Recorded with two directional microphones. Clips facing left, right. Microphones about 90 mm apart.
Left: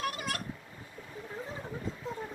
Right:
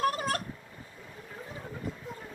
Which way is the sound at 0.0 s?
40° right (ahead or behind).